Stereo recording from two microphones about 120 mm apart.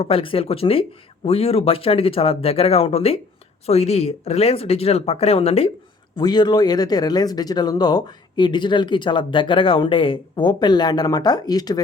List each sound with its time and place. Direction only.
0.0 s speech: 50° left (ahead or behind)
6.1 s speech: 35° left (ahead or behind)